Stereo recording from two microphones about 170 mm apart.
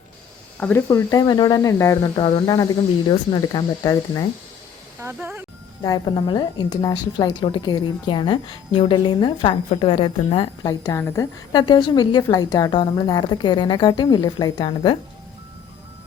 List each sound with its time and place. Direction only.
0.6 s a woman's voice: 10° left (ahead or behind)
2.1 s a woman's voice: 30° left (ahead or behind)
4.9 s speech: 15° right (ahead or behind)
5.8 s a woman's voice: 25° left (ahead or behind)